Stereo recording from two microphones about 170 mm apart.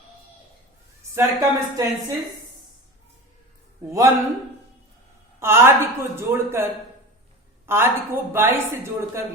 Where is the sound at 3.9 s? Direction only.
20° right (ahead or behind).